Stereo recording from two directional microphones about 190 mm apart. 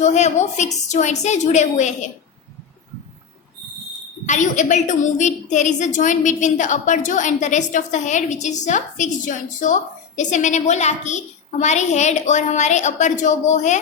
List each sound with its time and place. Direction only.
0.0 s a woman's voice: 40° left (ahead or behind)
4.3 s a woman's voice: 40° left (ahead or behind)